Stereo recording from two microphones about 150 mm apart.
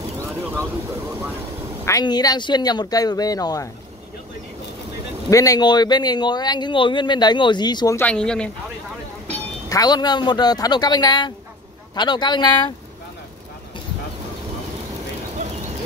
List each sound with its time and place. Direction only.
0.4 s a sound: 15° right (ahead or behind)
1.9 s speech: 25° left (ahead or behind)
5.3 s speech: 25° left (ahead or behind)
8.0 s speech: 5° left (ahead or behind)
9.7 s speech: 25° left (ahead or behind)